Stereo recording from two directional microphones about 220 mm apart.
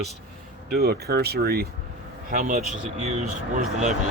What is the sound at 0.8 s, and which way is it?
A man's voice, 45° right (ahead or behind).